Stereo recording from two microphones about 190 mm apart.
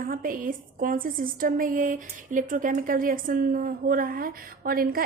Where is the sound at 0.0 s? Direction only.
45° right (ahead or behind).